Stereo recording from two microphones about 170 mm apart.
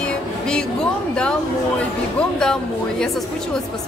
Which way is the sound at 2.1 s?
5° left (ahead or behind).